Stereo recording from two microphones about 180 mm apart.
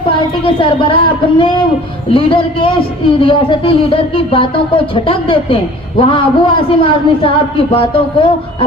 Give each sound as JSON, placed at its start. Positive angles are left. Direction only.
{"t": 0.4, "sound": "a man's voice", "side_deg": 30}